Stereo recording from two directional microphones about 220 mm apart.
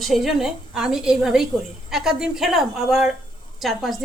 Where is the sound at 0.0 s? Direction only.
Centre (ahead or behind).